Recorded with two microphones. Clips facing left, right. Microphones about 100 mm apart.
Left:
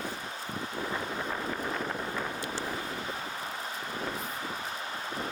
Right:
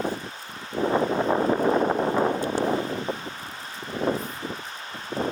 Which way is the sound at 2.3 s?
90° right.